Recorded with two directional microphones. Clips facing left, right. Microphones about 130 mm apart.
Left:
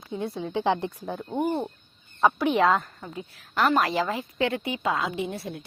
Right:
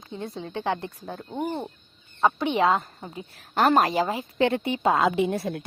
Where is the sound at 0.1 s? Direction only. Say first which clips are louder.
Left 4 dB; 10° left (ahead or behind).